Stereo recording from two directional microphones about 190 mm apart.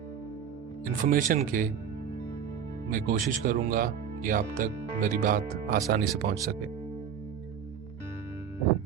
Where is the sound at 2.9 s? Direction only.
45° right (ahead or behind).